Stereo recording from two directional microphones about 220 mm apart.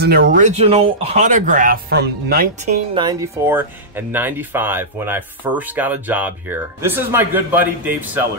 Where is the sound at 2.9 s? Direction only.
20° right (ahead or behind).